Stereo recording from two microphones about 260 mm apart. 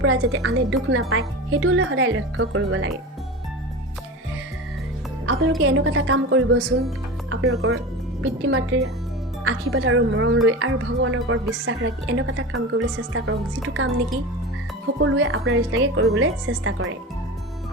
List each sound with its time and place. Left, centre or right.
0.0 s speech: right
5.5 s speech: right
8.2 s speech: right